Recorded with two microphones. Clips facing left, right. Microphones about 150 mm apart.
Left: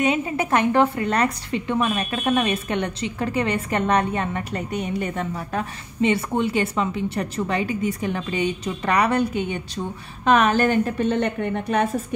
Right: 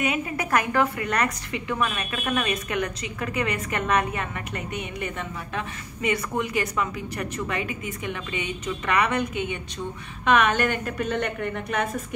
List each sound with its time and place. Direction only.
0.0 s a woman's voice: 25° left (ahead or behind)